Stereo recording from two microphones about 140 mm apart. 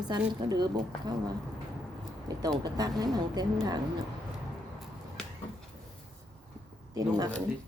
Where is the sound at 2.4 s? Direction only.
25° right (ahead or behind).